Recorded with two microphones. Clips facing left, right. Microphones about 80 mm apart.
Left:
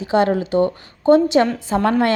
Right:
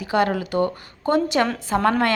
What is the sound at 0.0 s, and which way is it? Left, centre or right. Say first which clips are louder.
A woman's voice: left 4 dB; left.